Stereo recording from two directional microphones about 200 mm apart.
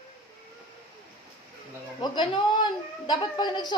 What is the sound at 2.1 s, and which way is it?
Speech, 20° left (ahead or behind).